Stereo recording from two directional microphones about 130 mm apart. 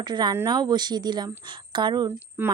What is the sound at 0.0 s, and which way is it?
A woman's voice, 35° right (ahead or behind).